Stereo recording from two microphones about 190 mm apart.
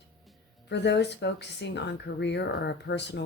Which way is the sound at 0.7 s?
65° left (ahead or behind).